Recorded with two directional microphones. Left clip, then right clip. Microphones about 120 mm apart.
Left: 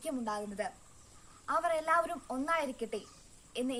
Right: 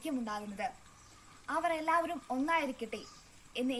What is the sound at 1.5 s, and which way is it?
A woman's voice, 30° left (ahead or behind).